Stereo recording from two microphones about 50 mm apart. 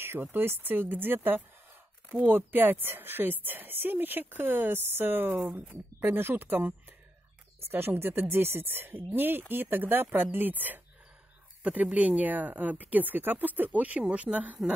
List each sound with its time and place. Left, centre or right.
0.0 s a woman's voice: right
5.7 s a woman's voice: right